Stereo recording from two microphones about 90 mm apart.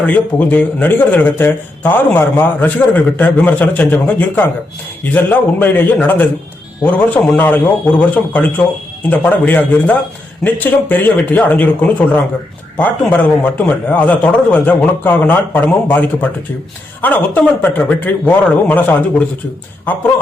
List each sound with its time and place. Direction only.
0.0 s a man's voice: 15° left (ahead or behind)